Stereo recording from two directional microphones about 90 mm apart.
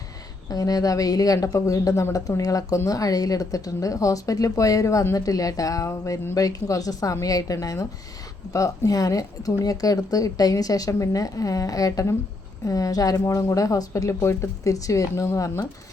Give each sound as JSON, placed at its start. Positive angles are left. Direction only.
{"t": 0.5, "sound": "speech", "side_deg": 40}